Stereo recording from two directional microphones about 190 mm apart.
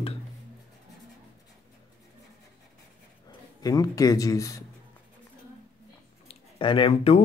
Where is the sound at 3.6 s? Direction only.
20° left (ahead or behind).